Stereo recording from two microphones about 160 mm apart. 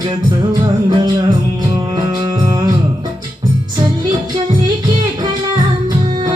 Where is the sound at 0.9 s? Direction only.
25° right (ahead or behind).